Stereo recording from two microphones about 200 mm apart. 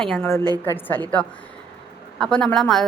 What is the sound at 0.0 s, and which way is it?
A woman's voice, 5° left (ahead or behind).